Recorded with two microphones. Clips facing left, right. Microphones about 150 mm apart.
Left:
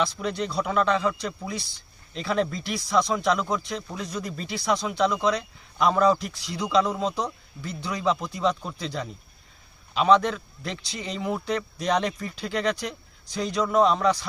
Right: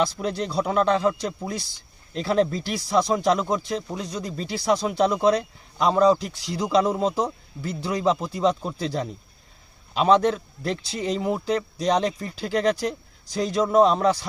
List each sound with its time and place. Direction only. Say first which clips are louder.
0.2 s a man's voice: right 2 dB; 35° right (ahead or behind)